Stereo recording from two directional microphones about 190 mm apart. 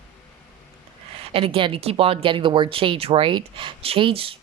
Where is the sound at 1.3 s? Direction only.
30° right (ahead or behind).